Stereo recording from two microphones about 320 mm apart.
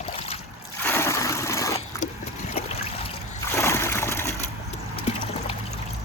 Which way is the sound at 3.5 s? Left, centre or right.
Centre.